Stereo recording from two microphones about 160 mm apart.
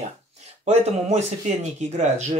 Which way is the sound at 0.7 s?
45° right (ahead or behind).